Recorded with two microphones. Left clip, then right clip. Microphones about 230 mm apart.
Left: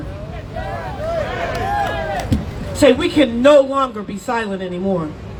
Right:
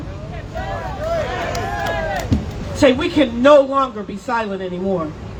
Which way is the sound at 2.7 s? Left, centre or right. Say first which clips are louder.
Left 2 dB; left.